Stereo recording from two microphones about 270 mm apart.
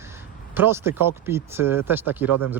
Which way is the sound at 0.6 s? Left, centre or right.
Centre.